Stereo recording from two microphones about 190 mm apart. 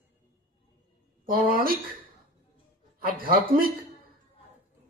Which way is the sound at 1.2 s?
50° right (ahead or behind).